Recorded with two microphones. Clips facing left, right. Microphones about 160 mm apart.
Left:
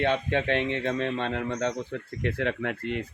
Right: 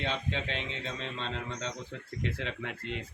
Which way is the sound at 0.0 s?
60° left (ahead or behind).